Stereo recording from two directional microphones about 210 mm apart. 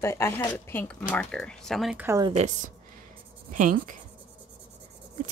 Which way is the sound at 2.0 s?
15° right (ahead or behind).